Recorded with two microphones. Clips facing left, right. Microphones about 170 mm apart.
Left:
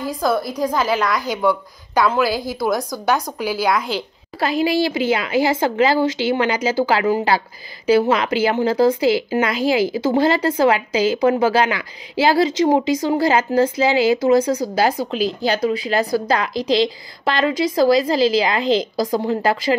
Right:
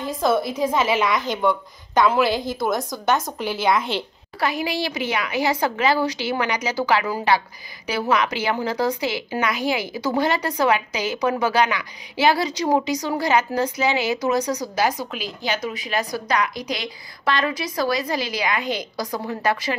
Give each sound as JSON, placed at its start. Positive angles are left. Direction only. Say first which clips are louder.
{"t": 0.0, "sound": "a woman's voice", "louder": "left 1 dB", "side_deg": 0}
{"t": 4.4, "sound": "speech", "louder": "left 6 dB", "side_deg": 25}